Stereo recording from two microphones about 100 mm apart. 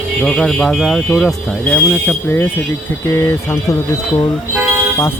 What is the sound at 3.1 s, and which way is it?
Speech, 30° left (ahead or behind).